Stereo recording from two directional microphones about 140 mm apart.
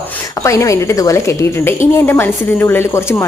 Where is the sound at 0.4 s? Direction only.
20° left (ahead or behind).